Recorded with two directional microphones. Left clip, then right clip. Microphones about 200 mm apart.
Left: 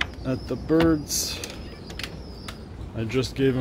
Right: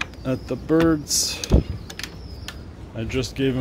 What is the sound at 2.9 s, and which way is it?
Speech, 10° right (ahead or behind).